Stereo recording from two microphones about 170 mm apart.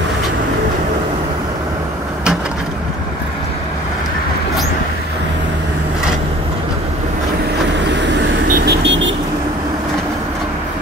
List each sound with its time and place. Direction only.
8.6 s vehicle: 90° right